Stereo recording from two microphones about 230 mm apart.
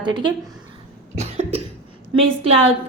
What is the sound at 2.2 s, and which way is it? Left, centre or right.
Speech, right.